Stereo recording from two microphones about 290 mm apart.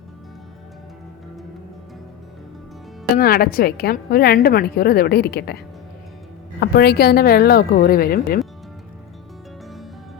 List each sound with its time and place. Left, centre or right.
3.2 s a woman's voice: left
6.6 s a woman's voice: left